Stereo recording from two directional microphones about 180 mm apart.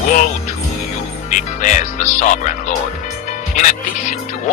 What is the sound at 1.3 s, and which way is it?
Speech, 45° left (ahead or behind).